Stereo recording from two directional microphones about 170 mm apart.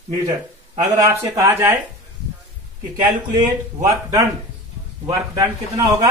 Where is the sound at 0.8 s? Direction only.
20° right (ahead or behind).